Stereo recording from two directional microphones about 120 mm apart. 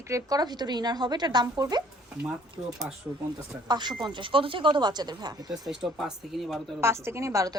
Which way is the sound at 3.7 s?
40° right (ahead or behind).